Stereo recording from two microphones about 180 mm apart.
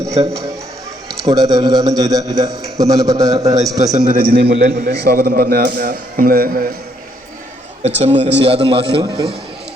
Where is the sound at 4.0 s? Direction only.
45° right (ahead or behind).